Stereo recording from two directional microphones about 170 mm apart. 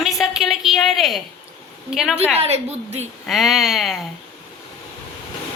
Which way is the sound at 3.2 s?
Centre (ahead or behind).